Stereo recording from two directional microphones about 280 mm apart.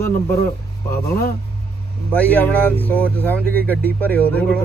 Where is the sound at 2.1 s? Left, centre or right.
Centre.